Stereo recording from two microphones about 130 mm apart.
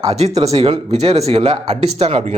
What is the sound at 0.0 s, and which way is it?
Speech, 50° right (ahead or behind).